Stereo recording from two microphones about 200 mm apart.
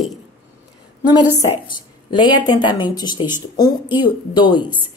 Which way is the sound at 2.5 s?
25° left (ahead or behind).